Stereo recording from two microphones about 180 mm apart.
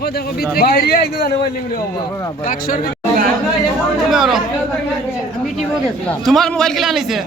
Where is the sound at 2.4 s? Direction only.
50° left (ahead or behind).